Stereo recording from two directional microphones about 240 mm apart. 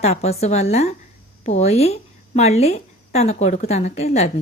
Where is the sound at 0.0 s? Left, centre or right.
Left.